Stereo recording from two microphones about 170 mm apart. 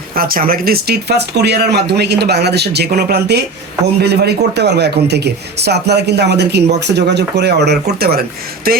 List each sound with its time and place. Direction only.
0.2 s speech: 60° right (ahead or behind)